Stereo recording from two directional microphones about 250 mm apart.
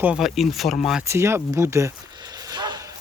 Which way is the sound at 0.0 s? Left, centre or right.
Centre.